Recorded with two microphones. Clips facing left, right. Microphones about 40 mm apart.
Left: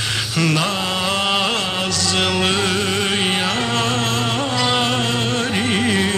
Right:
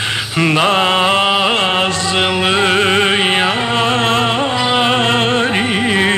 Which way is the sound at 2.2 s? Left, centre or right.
Right.